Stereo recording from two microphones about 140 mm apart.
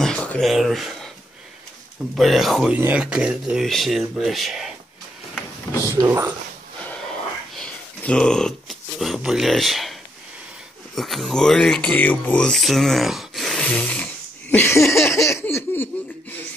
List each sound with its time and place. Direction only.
0.0 s a sound: 5° left (ahead or behind)
2.1 s speech: centre (ahead or behind)
6.0 s speech: 15° right (ahead or behind)
7.5 s speech: 5° left (ahead or behind)
11.0 s speech: centre (ahead or behind)
14.5 s laughter: 20° left (ahead or behind)